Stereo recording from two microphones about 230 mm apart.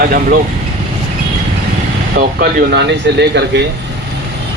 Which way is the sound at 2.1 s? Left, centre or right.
Right.